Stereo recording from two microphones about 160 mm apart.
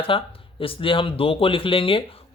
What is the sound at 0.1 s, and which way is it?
Speech, 35° left (ahead or behind).